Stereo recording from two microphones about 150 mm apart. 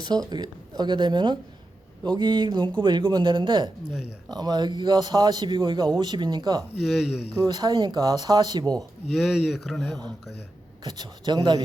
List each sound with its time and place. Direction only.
0.0 s a man's voice: 30° right (ahead or behind)
6.7 s speech: centre (ahead or behind)
7.4 s a man's voice: 30° right (ahead or behind)
9.1 s speech: 5° right (ahead or behind)
10.8 s a man's voice: 30° right (ahead or behind)